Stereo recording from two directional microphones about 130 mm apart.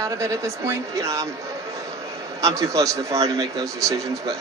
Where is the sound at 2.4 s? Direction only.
25° right (ahead or behind).